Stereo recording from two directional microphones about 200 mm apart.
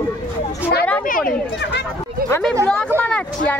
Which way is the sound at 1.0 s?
45° left (ahead or behind).